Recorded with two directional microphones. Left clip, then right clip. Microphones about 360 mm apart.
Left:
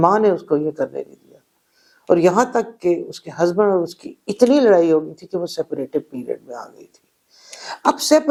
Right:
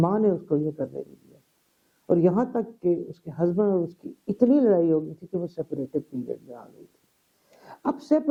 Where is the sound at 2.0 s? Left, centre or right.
Centre.